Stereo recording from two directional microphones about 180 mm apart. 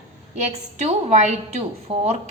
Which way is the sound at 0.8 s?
35° right (ahead or behind).